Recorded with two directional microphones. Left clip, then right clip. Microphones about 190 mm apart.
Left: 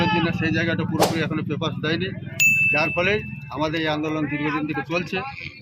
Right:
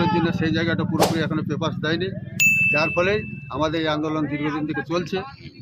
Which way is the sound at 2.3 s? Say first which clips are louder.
Even; centre (ahead or behind).